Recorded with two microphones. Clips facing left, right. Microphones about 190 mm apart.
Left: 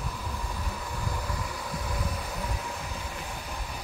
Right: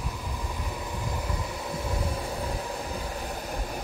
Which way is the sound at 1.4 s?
25° right (ahead or behind).